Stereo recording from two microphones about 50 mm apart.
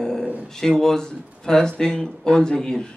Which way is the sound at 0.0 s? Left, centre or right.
Centre.